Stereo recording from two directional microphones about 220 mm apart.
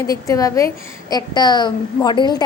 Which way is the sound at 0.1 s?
15° left (ahead or behind).